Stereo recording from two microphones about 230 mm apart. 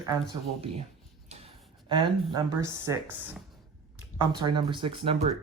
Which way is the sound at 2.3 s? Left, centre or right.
Centre.